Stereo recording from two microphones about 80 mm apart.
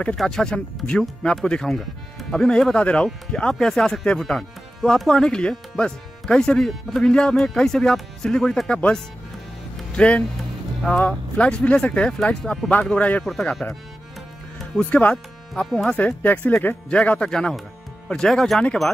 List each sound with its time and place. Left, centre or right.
0.2 s speech: centre
13.2 s speech: centre
14.8 s speech: left
15.6 s speech: centre